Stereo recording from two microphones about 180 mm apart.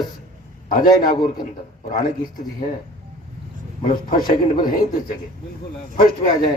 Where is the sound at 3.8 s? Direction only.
50° left (ahead or behind).